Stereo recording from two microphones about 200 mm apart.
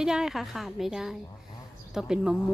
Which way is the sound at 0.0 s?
5° right (ahead or behind).